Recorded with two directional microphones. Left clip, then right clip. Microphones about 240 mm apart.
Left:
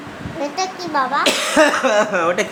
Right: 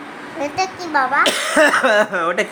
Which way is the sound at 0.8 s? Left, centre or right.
Centre.